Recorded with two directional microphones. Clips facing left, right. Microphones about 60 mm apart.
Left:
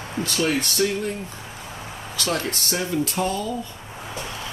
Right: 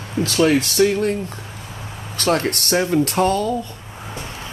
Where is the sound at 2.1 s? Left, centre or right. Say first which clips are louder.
Right 7 dB; right.